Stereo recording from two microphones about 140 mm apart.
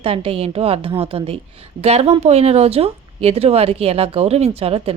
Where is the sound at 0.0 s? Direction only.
40° right (ahead or behind).